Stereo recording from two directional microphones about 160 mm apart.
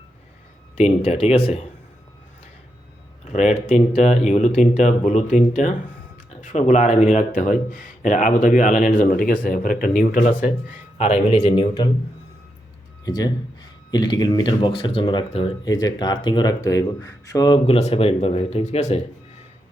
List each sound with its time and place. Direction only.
0.8 s speech: 40° left (ahead or behind)
3.2 s speech: 45° left (ahead or behind)
10.9 s speech: 40° left (ahead or behind)
13.1 s speech: 25° left (ahead or behind)
15.6 s speech: 25° left (ahead or behind)
17.7 s speech: 40° left (ahead or behind)